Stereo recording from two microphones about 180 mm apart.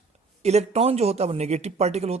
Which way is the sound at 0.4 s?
35° right (ahead or behind).